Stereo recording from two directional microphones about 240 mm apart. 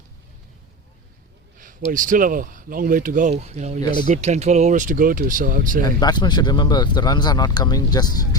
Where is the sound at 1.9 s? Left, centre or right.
Right.